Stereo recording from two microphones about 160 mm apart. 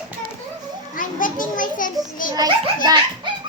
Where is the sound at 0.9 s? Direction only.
55° left (ahead or behind).